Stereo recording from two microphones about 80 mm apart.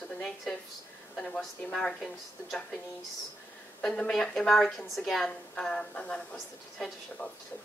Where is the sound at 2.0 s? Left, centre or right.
Centre.